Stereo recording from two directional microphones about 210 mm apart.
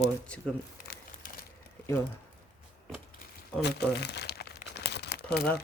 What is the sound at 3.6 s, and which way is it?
Crumpling, 50° left (ahead or behind).